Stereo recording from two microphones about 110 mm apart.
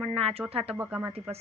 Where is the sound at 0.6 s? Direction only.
15° right (ahead or behind).